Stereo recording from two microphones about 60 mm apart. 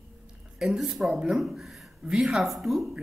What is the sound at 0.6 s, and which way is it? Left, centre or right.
A man's voice, centre.